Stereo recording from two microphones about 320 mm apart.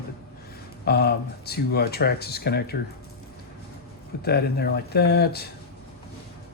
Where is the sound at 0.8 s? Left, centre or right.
Left.